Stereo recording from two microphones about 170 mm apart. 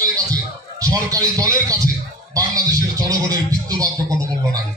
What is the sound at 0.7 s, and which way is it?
A man's voice, 20° right (ahead or behind).